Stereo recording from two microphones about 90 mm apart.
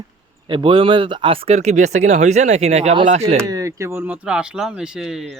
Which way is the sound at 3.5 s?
35° right (ahead or behind).